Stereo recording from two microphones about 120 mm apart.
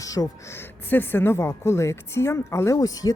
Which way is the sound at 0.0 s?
30° left (ahead or behind).